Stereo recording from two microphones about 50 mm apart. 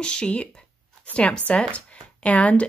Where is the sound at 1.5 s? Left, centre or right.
Left.